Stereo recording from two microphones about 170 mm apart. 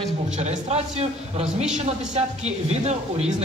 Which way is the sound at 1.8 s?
40° right (ahead or behind).